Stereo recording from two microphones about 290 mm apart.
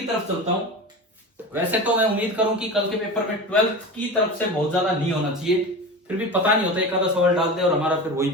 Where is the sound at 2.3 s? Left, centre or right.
Centre.